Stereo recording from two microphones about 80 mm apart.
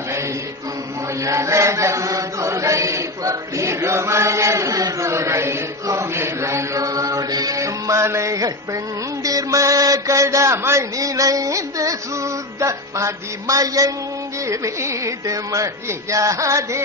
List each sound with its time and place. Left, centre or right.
1.2 s chant: right
7.2 s music: right
9.2 s mantra: right
14.4 s music: right